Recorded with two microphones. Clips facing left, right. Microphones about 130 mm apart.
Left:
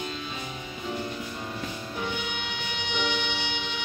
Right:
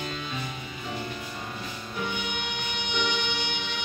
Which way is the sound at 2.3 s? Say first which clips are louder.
Right 1 dB; 55° right (ahead or behind).